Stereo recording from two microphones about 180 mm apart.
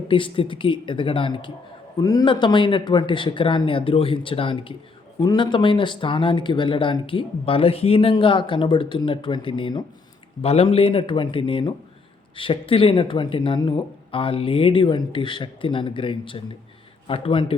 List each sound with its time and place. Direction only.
0.1 s a man's voice: 30° left (ahead or behind)